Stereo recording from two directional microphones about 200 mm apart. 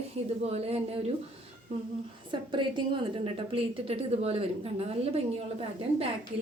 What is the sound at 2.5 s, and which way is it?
A woman's voice, 25° right (ahead or behind).